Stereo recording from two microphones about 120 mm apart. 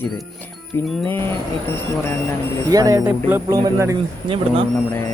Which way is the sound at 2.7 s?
30° right (ahead or behind).